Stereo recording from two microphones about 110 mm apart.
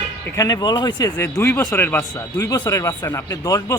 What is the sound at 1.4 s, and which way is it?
Speech, 25° left (ahead or behind).